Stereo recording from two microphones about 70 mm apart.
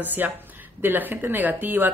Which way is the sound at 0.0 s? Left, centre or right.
Right.